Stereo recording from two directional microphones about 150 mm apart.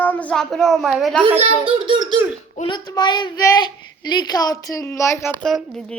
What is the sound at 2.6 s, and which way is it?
A child's voice, 30° left (ahead or behind).